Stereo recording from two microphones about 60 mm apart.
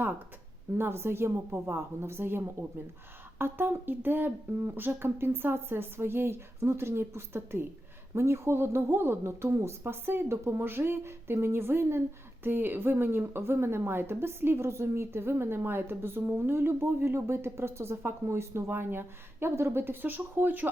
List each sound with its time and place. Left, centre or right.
0.8 s a woman's voice: right